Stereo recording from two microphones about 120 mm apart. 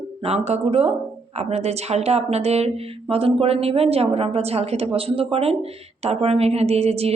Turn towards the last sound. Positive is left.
turn(degrees=-60)  # may be behind; listen again after turning